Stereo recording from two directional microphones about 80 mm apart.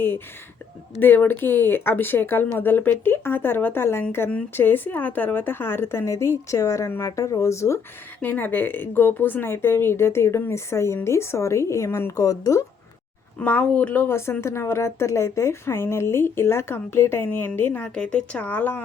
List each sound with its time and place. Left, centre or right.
0.9 s a woman's voice: left
8.2 s speech: left
13.4 s a woman's voice: centre
17.8 s speech: centre